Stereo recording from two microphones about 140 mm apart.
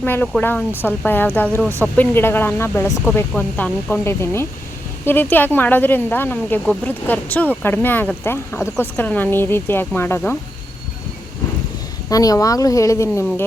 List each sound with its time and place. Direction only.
0.0 s speech: 15° left (ahead or behind)
12.0 s speech: 25° left (ahead or behind)